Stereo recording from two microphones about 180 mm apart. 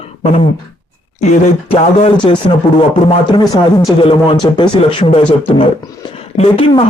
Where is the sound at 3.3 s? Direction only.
25° left (ahead or behind).